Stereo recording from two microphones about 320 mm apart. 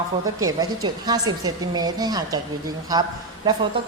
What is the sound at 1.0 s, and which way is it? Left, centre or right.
A woman's voice, centre.